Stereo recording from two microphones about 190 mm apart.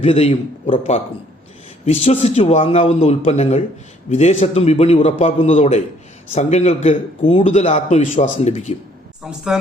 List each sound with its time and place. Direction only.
0.0 s a man's voice: 35° left (ahead or behind)
9.2 s a woman's voice: centre (ahead or behind)